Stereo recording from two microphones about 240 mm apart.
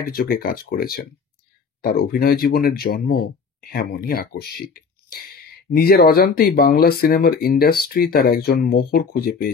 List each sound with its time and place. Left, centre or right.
0.0 s speech: left